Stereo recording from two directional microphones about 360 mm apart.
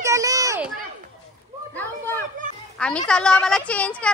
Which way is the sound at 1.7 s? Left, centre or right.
Centre.